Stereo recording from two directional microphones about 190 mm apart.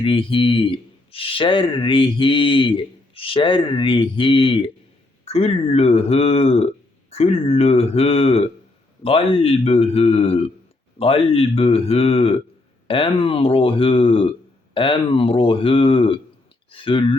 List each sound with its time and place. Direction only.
0.0 s speech: 25° left (ahead or behind)